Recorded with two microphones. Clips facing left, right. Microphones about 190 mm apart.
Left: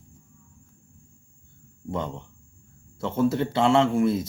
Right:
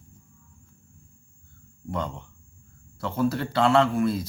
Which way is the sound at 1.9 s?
20° left (ahead or behind).